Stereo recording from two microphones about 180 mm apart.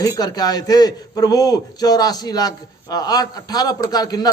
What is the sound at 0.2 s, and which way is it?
A man's voice, 20° left (ahead or behind).